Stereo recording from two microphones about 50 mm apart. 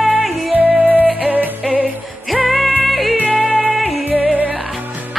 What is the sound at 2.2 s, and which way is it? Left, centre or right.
Music, centre.